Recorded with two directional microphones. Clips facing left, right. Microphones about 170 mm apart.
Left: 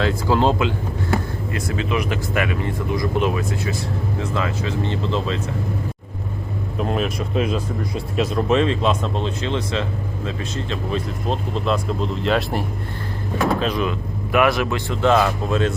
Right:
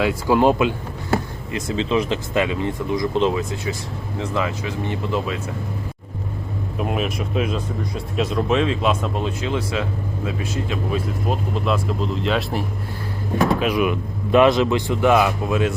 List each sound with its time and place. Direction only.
0.0 s speech: 15° right (ahead or behind)
6.7 s speech: 5° right (ahead or behind)
13.6 s speech: 10° right (ahead or behind)